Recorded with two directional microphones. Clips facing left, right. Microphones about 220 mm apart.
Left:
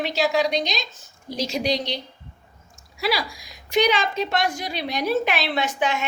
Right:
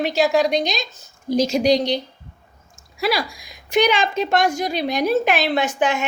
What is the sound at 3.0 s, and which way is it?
A woman's voice, 50° right (ahead or behind).